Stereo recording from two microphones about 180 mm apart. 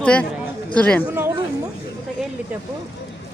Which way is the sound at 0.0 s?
5° left (ahead or behind).